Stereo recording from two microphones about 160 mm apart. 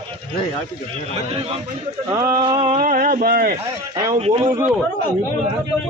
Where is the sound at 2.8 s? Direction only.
60° right (ahead or behind).